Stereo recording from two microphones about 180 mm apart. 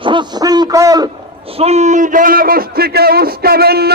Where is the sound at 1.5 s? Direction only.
35° right (ahead or behind); by 3.9 s 60° right (ahead or behind).